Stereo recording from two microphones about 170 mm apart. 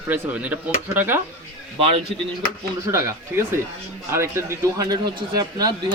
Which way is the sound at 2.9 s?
15° right (ahead or behind).